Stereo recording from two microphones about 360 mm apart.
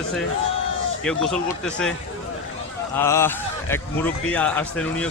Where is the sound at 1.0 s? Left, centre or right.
Centre.